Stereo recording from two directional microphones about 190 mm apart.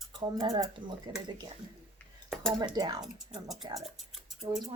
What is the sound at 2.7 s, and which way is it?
Speech, 20° right (ahead or behind).